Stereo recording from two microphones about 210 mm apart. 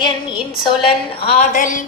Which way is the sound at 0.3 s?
25° left (ahead or behind).